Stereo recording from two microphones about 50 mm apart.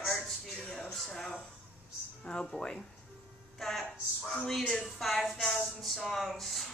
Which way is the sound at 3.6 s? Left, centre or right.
Centre.